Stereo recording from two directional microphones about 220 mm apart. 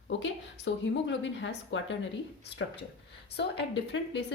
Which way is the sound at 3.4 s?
50° left (ahead or behind).